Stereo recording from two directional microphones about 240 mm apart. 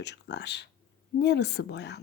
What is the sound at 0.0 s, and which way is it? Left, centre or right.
A woman's voice, left.